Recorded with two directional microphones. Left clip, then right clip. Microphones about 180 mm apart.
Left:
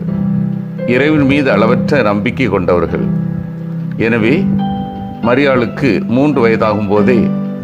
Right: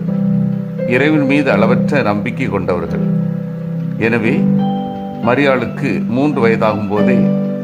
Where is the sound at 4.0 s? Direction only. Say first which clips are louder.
Left 3 dB; 20° left (ahead or behind).